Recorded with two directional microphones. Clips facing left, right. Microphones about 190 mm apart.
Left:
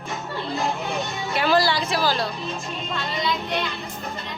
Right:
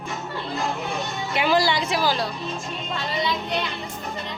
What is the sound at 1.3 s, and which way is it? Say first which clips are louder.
Speech: even; 20° right (ahead or behind).